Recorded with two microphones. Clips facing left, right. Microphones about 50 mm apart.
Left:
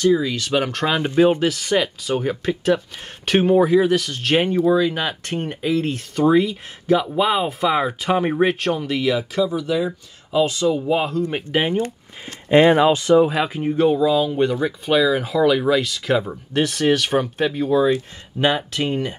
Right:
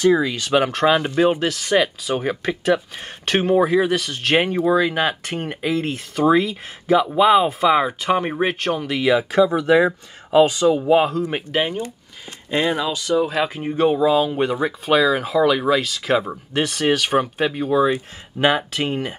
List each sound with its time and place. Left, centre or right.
0.1 s speech: right
0.4 s speech: centre
9.5 s speech: right
10.4 s speech: centre
11.1 s speech: centre
12.4 s speech: left
13.4 s speech: centre
13.9 s speech: right
15.1 s speech: centre